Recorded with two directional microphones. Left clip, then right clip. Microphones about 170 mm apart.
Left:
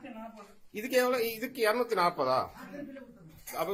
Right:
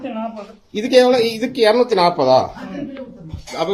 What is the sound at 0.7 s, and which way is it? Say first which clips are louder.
Speech: right 16 dB; 25° right (ahead or behind).